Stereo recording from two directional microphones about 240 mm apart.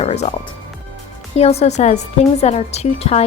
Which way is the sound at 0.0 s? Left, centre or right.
Left.